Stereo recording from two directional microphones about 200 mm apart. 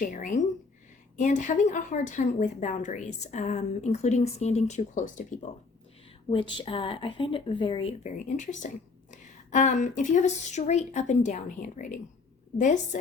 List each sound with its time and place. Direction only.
0.0 s speech: 40° left (ahead or behind)
6.3 s speech: 25° left (ahead or behind)